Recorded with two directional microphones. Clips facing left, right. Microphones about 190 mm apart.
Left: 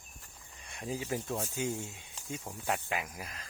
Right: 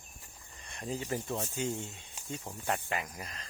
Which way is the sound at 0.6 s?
5° left (ahead or behind).